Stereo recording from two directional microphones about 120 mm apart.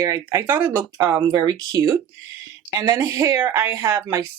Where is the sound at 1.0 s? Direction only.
30° right (ahead or behind).